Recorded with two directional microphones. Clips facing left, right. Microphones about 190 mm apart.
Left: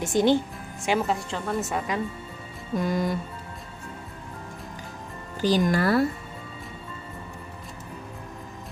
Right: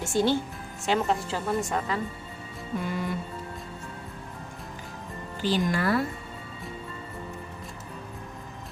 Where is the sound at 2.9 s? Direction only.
40° left (ahead or behind).